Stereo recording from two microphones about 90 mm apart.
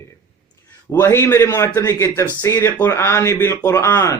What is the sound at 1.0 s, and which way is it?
A man's voice, 30° left (ahead or behind).